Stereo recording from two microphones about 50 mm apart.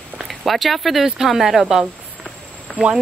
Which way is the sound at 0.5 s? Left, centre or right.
Centre.